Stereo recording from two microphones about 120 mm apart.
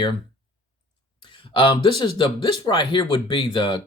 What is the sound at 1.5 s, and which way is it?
Speech, 45° left (ahead or behind).